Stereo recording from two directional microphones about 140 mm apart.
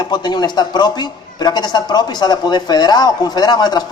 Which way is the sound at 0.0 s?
30° left (ahead or behind).